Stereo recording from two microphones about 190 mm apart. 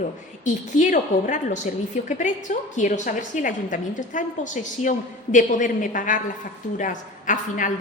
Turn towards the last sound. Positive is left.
turn(degrees=40)  # may be behind; listen again after turning